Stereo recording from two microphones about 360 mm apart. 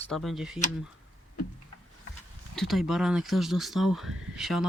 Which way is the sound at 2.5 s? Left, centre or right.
Centre.